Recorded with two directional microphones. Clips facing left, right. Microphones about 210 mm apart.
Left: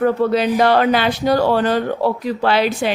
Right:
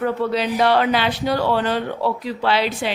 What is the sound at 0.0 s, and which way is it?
Speech, 50° left (ahead or behind).